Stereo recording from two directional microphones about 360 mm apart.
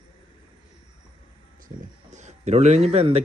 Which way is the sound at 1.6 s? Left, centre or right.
Centre.